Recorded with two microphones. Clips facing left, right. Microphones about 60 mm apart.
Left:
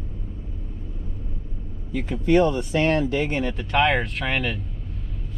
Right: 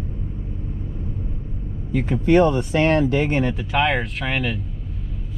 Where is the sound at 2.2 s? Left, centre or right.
Right.